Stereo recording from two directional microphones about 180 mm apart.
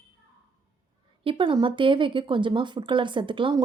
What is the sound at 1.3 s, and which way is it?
Speech, 30° right (ahead or behind).